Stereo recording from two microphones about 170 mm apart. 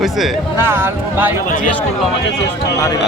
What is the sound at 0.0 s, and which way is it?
Speech, centre (ahead or behind).